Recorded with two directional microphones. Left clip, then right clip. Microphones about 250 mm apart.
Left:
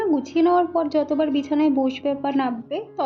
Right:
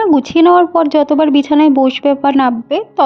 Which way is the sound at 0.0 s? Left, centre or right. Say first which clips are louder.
Right 10 dB; right.